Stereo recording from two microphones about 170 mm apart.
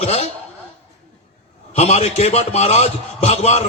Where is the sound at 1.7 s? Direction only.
40° left (ahead or behind).